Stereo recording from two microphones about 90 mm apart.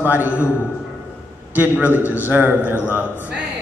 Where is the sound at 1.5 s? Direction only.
20° right (ahead or behind).